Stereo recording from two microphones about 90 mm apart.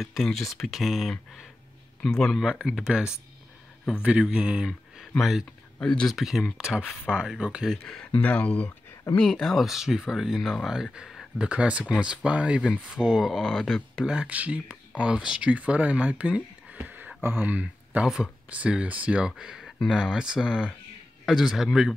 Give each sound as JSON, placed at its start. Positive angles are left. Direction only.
{"t": 0.0, "sound": "speech", "side_deg": 5}
{"t": 2.6, "sound": "speech", "side_deg": -10}
{"t": 5.8, "sound": "speech", "side_deg": 10}
{"t": 6.1, "sound": "speech", "side_deg": 0}
{"t": 7.7, "sound": "speech", "side_deg": 5}
{"t": 8.2, "sound": "speech", "side_deg": 15}
{"t": 9.2, "sound": "speech", "side_deg": 5}
{"t": 18.0, "sound": "speech", "side_deg": -5}